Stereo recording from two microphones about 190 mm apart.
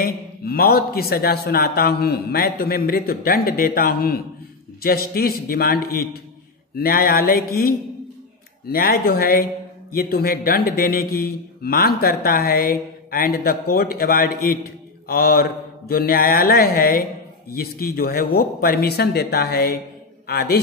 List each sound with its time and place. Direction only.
0.0 s a man's voice: 55° left (ahead or behind)
8.6 s a man's voice: 55° left (ahead or behind)